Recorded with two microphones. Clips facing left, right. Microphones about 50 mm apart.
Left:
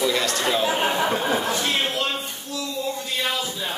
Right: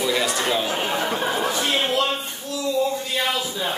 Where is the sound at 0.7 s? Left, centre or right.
Centre.